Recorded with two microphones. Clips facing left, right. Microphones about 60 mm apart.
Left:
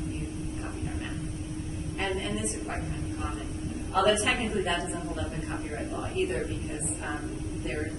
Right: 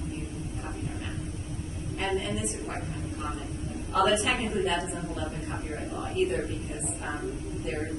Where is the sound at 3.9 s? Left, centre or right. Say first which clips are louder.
Even; left.